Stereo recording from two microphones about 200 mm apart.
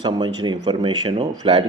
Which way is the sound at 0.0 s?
20° right (ahead or behind).